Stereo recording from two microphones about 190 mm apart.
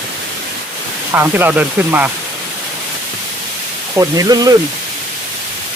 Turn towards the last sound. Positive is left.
turn(degrees=-20)  # may be behind; listen again after turning